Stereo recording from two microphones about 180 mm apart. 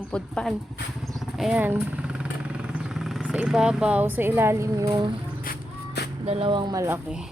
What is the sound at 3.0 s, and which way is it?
Speech, 5° right (ahead or behind).